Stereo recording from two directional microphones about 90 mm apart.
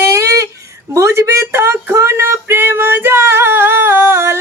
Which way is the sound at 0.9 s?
35° right (ahead or behind).